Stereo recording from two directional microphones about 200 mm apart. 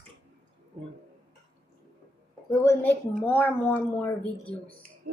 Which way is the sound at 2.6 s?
10° left (ahead or behind).